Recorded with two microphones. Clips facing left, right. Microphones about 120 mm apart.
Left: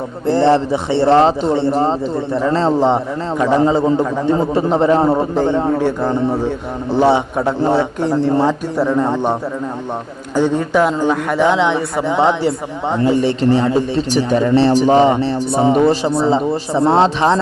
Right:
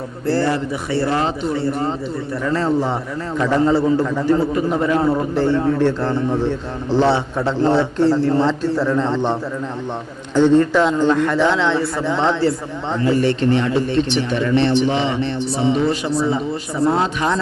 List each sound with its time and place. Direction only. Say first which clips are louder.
0.3 s speech: left 6 dB; 25° left (ahead or behind)
4.5 s speech: left 5 dB; 30° left (ahead or behind)
5.3 s a man's voice: left 2 dB; 15° left (ahead or behind)
13.2 s speech: left 3 dB; 30° left (ahead or behind); by 15.9 s 50° left (ahead or behind)
16.2 s speech: left 5 dB; 30° left (ahead or behind)